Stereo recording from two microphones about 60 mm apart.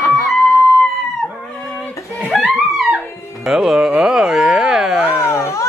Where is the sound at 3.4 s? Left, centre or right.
Centre.